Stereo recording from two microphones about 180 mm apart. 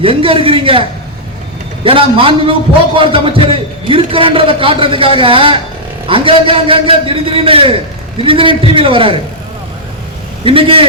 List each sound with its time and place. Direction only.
0.0 s a man's voice: 30° right (ahead or behind)
10.4 s a man's voice: 30° right (ahead or behind)